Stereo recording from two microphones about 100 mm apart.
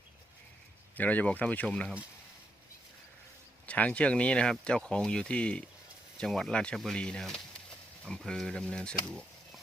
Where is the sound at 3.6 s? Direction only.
15° left (ahead or behind).